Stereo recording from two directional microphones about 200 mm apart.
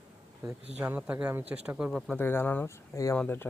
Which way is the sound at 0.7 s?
10° right (ahead or behind).